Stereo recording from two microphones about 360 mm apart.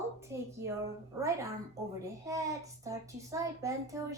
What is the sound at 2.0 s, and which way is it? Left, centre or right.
A child's voice, centre.